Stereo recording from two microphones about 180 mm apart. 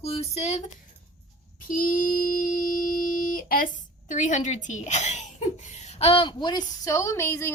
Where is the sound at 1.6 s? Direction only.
50° left (ahead or behind).